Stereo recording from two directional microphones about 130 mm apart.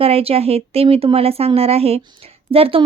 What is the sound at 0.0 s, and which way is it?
Speech, 50° right (ahead or behind).